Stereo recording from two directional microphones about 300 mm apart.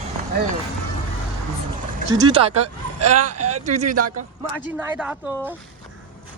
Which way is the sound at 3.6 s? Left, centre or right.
Right.